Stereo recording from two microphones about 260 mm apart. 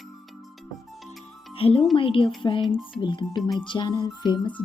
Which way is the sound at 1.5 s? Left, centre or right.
Left.